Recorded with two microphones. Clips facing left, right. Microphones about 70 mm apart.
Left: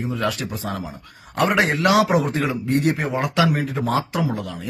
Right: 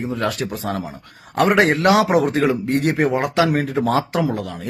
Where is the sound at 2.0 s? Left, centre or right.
Right.